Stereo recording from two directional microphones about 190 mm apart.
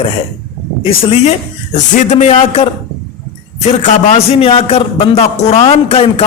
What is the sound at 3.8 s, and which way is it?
A man's voice, 30° left (ahead or behind).